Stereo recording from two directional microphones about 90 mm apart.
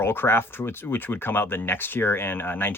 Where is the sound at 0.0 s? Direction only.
25° left (ahead or behind).